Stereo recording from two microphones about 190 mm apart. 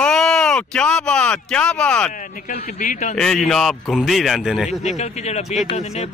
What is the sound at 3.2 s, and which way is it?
Speech, 5° left (ahead or behind).